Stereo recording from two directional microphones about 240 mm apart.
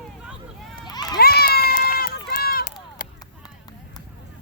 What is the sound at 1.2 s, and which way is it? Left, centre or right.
Run, left.